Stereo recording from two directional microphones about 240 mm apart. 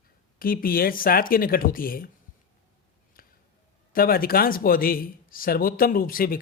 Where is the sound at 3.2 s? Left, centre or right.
Left.